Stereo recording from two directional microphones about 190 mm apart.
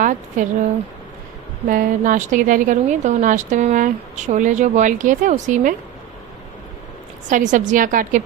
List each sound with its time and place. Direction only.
0.0 s a woman's voice: 40° right (ahead or behind)
1.7 s a woman's voice: 45° right (ahead or behind)
7.3 s a woman's voice: 40° right (ahead or behind)